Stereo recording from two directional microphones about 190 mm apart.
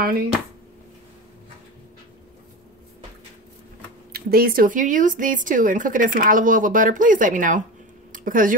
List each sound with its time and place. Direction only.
4.1 s a woman's voice: 50° right (ahead or behind)